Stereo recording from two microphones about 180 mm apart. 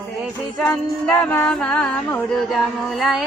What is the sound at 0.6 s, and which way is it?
Music, 5° left (ahead or behind).